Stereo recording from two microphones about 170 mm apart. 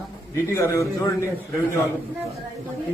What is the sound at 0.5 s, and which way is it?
Speech, 15° left (ahead or behind).